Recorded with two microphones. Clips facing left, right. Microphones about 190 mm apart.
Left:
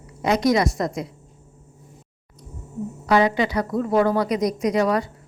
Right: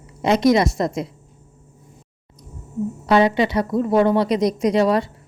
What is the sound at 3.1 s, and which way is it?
A woman's voice, 25° right (ahead or behind).